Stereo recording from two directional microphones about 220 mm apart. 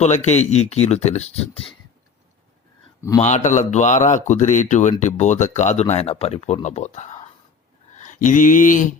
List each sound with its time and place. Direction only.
0.0 s speech: 30° left (ahead or behind)
3.2 s speech: 30° left (ahead or behind)
7.9 s mantra: 35° left (ahead or behind)